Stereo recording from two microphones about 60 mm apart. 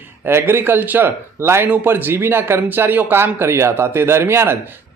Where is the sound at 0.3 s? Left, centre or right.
Right.